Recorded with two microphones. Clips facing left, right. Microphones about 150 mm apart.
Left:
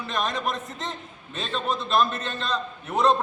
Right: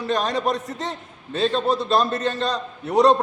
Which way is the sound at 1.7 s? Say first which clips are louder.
Right 1 dB; 35° right (ahead or behind).